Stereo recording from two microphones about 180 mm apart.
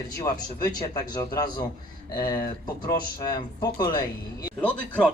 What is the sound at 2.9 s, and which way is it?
Speech, 20° left (ahead or behind).